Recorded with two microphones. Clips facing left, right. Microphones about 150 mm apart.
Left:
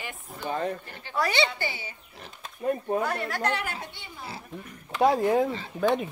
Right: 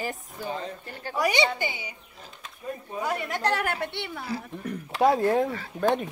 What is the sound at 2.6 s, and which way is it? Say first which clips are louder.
Speech: left 8 dB; 60° left (ahead or behind).